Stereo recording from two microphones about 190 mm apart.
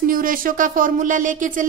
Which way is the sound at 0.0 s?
45° right (ahead or behind).